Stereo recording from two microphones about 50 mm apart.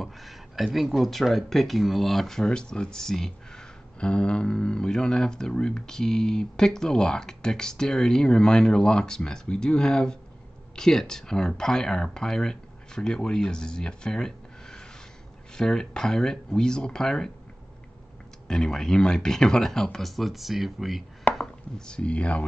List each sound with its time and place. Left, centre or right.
0.0 s a sound: centre
0.7 s speech: centre
18.5 s speech: centre
21.4 s speech: centre